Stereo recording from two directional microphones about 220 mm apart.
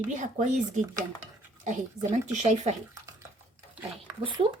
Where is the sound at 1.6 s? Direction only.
30° right (ahead or behind).